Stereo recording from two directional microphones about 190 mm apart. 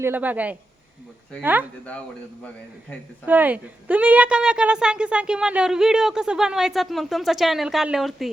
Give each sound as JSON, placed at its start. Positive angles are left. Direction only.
{"t": 0.0, "sound": "a man's voice", "side_deg": -10}
{"t": 3.2, "sound": "a woman's voice", "side_deg": -10}